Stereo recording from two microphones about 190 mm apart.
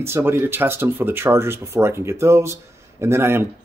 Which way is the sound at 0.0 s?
15° right (ahead or behind).